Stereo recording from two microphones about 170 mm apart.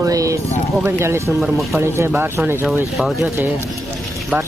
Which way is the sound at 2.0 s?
15° right (ahead or behind).